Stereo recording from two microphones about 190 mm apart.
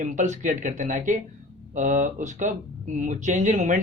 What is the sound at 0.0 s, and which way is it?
Speech, 40° right (ahead or behind).